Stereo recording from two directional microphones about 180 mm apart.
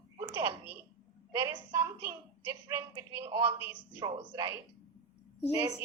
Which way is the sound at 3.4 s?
10° right (ahead or behind).